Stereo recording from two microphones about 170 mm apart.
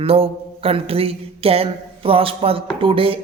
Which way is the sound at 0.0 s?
35° right (ahead or behind).